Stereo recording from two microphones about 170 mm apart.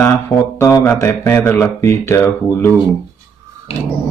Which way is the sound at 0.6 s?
15° left (ahead or behind).